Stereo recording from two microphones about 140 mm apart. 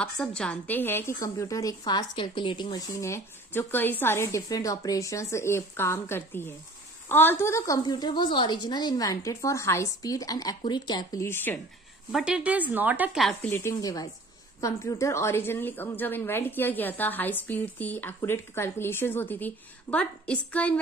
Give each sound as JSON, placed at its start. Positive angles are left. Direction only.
{"t": 0.0, "sound": "a woman's voice", "side_deg": 5}
{"t": 12.1, "sound": "a woman's voice", "side_deg": -5}
{"t": 13.2, "sound": "speech", "side_deg": 0}
{"t": 13.5, "sound": "a woman's voice", "side_deg": 20}